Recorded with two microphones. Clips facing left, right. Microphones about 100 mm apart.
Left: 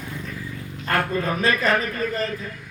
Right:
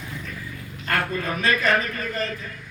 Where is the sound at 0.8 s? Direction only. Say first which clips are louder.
Left 2 dB; 30° left (ahead or behind).